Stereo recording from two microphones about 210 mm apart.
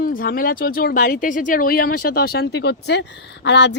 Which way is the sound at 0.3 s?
45° left (ahead or behind).